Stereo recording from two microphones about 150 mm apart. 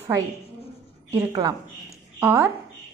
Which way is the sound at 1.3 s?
25° right (ahead or behind).